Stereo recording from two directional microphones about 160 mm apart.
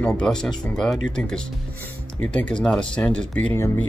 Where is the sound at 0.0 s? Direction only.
5° left (ahead or behind).